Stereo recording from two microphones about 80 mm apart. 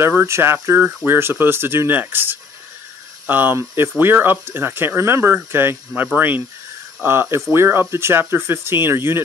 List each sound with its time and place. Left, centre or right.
0.0 s speech: right